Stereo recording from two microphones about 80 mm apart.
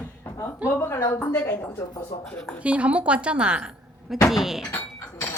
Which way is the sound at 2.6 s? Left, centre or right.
Centre.